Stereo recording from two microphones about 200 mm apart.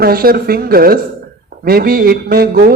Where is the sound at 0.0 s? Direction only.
50° right (ahead or behind).